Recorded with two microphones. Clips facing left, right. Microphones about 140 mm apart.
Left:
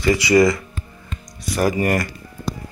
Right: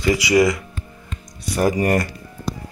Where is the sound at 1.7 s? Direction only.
35° right (ahead or behind).